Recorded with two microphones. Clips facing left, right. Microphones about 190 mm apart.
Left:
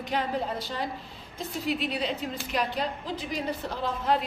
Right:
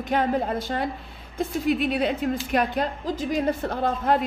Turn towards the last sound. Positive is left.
turn(degrees=-55)  # may be behind; listen again after turning